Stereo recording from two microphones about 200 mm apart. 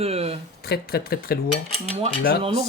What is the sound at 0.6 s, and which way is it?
Speech, 50° left (ahead or behind).